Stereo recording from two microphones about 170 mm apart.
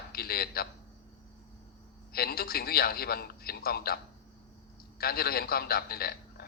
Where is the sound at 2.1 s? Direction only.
65° left (ahead or behind).